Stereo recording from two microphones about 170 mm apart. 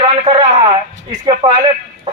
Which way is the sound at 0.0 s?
30° right (ahead or behind).